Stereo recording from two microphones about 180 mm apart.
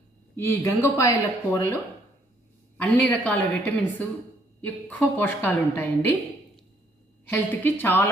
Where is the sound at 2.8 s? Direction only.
10° left (ahead or behind).